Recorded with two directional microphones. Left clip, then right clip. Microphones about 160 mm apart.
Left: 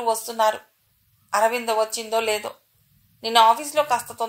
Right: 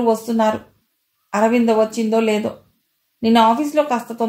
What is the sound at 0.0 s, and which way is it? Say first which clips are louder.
Speech: right 4 dB; 40° left (ahead or behind).